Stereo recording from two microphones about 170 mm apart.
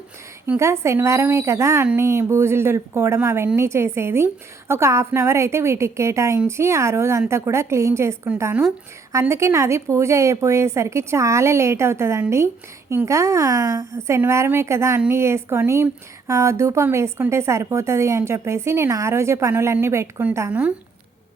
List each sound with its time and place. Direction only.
0.4 s a woman's voice: 15° right (ahead or behind)